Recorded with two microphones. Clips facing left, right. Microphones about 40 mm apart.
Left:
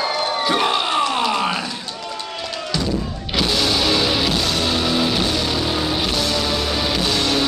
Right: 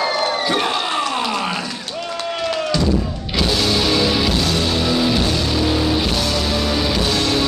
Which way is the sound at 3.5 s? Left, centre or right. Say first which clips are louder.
Right 1 dB; centre.